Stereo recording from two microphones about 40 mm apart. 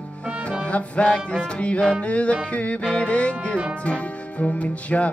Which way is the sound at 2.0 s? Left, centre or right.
Left.